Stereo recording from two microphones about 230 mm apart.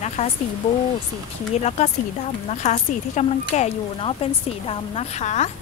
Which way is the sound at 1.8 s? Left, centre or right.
Left.